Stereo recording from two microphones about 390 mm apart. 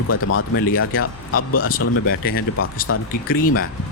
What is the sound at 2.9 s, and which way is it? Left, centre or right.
Speech, left.